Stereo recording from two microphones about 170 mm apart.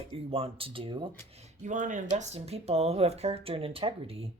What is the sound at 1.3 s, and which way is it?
Speech, 45° right (ahead or behind).